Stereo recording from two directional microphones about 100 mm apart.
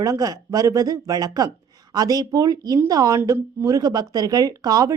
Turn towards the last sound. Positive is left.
turn(degrees=-40)  # may be behind; listen again after turning